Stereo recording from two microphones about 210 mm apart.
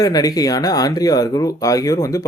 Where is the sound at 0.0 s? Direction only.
15° left (ahead or behind).